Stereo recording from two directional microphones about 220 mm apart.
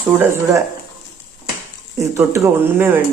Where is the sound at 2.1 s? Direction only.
10° right (ahead or behind).